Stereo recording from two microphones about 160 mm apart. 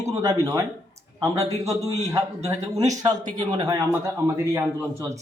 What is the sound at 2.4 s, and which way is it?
Speech, 20° right (ahead or behind).